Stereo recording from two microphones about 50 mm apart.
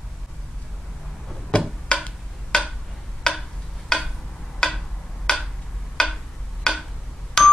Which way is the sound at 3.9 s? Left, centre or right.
Centre.